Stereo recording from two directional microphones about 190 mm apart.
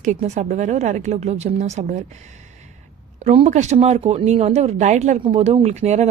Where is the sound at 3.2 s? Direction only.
35° right (ahead or behind).